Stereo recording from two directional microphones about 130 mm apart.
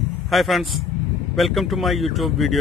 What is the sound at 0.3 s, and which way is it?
Speech, centre (ahead or behind).